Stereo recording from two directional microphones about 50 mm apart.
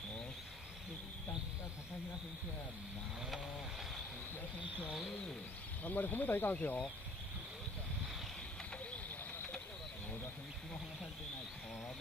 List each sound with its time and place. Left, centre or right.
5.9 s speech: left